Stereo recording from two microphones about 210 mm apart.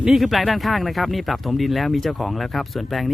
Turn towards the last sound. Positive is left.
turn(degrees=0)  # may be behind; listen again after turning